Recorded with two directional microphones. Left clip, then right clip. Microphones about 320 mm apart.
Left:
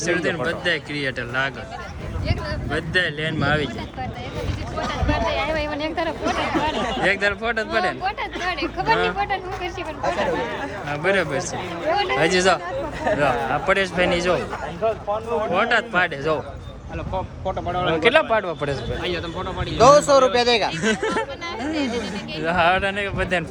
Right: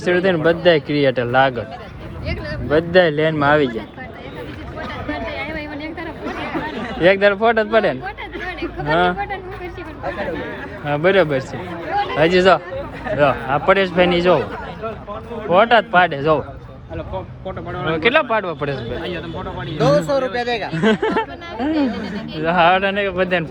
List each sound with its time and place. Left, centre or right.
0.0 s speech: centre
2.6 s speech: centre
5.3 s a sound: centre
6.2 s chatter: left
7.0 s speech: centre
8.0 s a sound: centre
9.1 s speech: centre
10.8 s speech: centre
15.5 s speech: centre
17.7 s speech: centre
19.8 s speech: centre
20.7 s speech: centre